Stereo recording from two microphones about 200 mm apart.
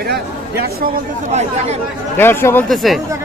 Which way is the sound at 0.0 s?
50° right (ahead or behind).